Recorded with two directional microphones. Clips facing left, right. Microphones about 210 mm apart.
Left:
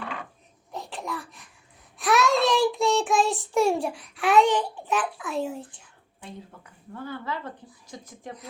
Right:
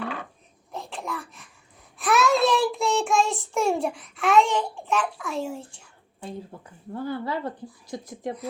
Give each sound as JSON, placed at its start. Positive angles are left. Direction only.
{"t": 0.7, "sound": "a sound", "side_deg": 0}
{"t": 2.0, "sound": "child singing", "side_deg": 0}
{"t": 6.2, "sound": "speech", "side_deg": -35}